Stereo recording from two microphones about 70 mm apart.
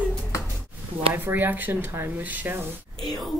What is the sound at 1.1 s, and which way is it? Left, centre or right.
Speech, right.